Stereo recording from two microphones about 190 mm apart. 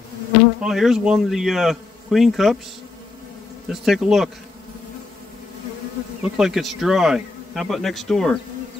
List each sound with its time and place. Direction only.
0.6 s speech: centre (ahead or behind)
3.6 s speech: centre (ahead or behind)
6.2 s speech: 5° right (ahead or behind)